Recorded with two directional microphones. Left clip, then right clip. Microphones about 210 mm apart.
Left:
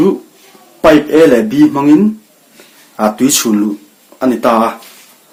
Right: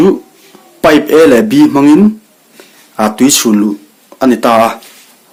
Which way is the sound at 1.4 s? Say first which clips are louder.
Right 2 dB; 35° right (ahead or behind).